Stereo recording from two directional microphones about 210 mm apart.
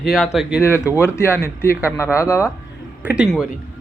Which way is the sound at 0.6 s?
10° left (ahead or behind).